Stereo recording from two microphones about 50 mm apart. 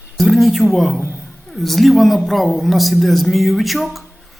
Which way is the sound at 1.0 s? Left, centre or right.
Right.